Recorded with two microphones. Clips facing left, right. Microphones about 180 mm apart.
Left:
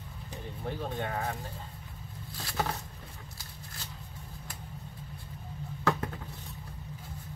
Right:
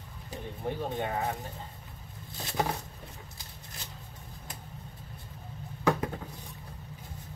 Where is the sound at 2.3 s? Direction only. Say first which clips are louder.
Right 3 dB; 20° right (ahead or behind).